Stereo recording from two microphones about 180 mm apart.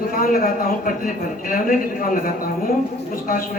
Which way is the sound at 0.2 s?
50° left (ahead or behind).